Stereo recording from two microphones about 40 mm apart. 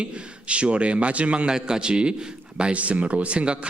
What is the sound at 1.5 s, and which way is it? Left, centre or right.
A man's voice, centre.